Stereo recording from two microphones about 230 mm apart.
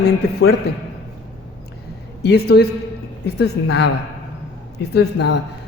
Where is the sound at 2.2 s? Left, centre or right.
Left.